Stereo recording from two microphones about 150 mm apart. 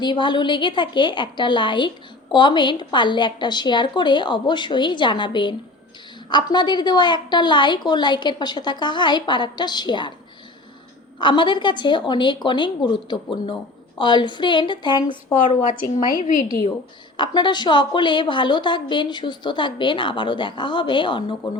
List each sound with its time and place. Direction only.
0.0 s a woman's voice: 30° left (ahead or behind)
11.2 s a woman's voice: 30° left (ahead or behind)
15.4 s a woman's voice: 55° left (ahead or behind)
17.2 s a woman's voice: 30° left (ahead or behind)